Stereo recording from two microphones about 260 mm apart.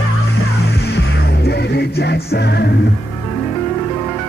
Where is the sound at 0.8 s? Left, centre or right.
Left.